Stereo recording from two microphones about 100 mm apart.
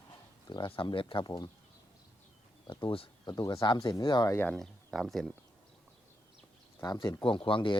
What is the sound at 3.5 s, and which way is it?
Speech, 55° left (ahead or behind).